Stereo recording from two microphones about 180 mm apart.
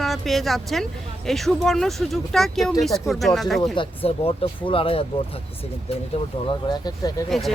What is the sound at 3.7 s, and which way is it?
Speech, 30° left (ahead or behind).